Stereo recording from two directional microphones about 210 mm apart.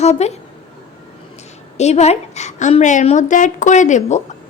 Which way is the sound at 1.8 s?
30° left (ahead or behind).